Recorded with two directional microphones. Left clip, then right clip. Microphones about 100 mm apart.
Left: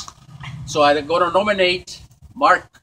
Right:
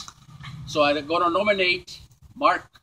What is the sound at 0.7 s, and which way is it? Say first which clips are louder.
Speech: left 6 dB; 35° left (ahead or behind).